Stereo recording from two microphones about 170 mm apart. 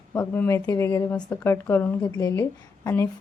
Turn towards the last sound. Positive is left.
turn(degrees=15)  # may be behind; listen again after turning